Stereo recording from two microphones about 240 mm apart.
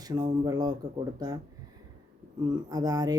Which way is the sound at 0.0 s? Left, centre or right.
Centre.